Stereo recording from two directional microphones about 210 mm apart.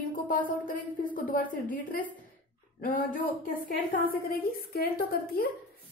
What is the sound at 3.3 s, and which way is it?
A woman's voice, 45° left (ahead or behind).